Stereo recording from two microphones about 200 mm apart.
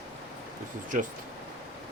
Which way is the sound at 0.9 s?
40° right (ahead or behind).